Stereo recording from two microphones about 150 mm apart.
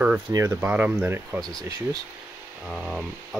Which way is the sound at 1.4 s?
5° left (ahead or behind).